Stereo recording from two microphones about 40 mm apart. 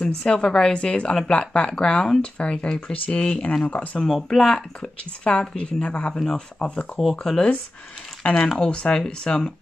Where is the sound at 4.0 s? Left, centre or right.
Centre.